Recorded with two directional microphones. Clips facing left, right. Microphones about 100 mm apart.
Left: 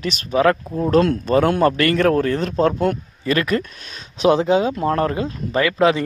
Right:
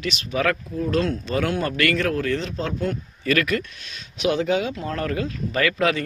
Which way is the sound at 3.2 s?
30° left (ahead or behind).